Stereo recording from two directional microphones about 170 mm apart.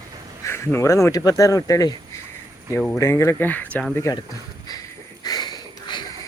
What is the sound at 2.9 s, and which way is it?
Speech, 15° left (ahead or behind).